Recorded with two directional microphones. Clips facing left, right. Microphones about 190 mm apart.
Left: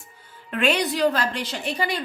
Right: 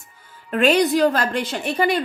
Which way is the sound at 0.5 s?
40° right (ahead or behind).